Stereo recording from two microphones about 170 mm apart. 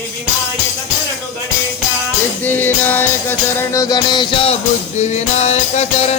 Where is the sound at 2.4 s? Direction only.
10° left (ahead or behind).